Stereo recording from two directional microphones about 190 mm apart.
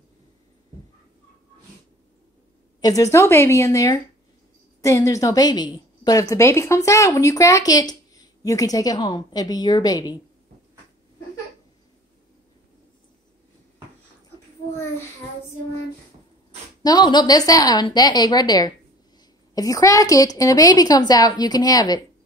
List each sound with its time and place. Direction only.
2.8 s a woman's voice: 20° left (ahead or behind)
16.8 s a woman's voice: 20° left (ahead or behind)